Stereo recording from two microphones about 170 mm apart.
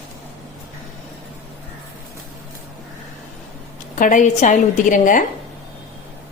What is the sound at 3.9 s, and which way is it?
A woman's voice, 50° left (ahead or behind).